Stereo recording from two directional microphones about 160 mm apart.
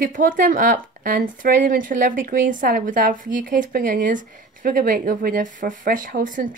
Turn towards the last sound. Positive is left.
turn(degrees=-55)  # may be behind; listen again after turning